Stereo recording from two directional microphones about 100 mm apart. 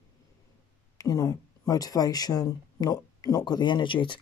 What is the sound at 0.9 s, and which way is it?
Speech, 35° left (ahead or behind).